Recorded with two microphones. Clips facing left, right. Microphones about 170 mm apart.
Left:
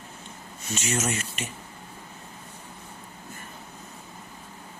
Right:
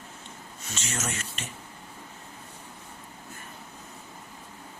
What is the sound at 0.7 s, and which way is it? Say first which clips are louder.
Speech: left 6 dB; 10° left (ahead or behind).